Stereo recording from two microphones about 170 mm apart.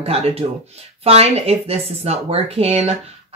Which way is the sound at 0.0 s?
35° right (ahead or behind).